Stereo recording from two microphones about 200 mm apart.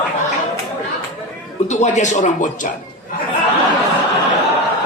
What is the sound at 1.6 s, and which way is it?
Speech, 35° left (ahead or behind).